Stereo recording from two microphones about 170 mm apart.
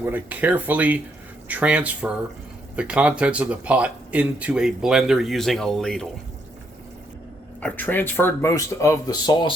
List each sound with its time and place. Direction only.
0.0 s speech: 10° right (ahead or behind)
7.6 s speech: 10° left (ahead or behind)